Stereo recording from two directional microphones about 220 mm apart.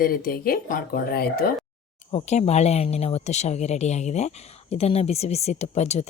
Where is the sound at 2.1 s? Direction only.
30° left (ahead or behind).